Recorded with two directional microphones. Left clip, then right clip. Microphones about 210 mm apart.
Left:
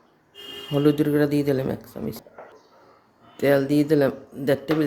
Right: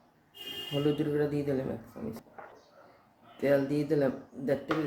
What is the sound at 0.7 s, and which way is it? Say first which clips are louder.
Speech: left 10 dB; 45° left (ahead or behind).